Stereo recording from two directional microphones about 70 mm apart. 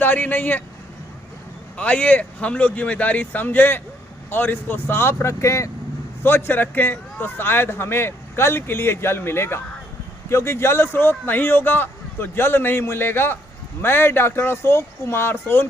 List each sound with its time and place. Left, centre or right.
0.0 s speech: left
1.7 s a man's voice: centre; by 5.7 s left
6.2 s a man's voice: left